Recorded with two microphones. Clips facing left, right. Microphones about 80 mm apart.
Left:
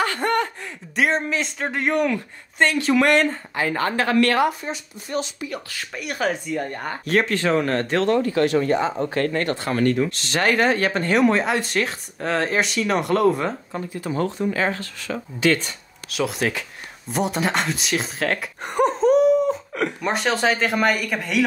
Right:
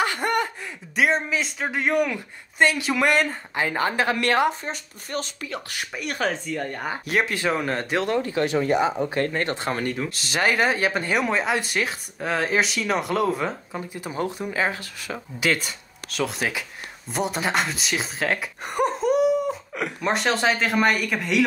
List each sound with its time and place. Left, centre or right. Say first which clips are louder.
0.0 s a sound: left 2 dB; centre
0.9 s speech: left 1 dB; centre
3.5 s a woman's voice: even; centre
4.6 s speech: left 2 dB; right
5.9 s speech: left 2 dB; centre
6.8 s a woman's voice: left 3 dB; centre
9.9 s speech: left 4 dB; centre
14.0 s speech: left 5 dB; centre